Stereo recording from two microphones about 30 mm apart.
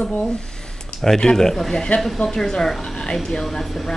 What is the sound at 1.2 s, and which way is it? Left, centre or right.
Speech, centre.